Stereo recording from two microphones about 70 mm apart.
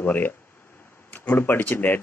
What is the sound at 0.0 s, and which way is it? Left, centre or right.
A man's voice, left.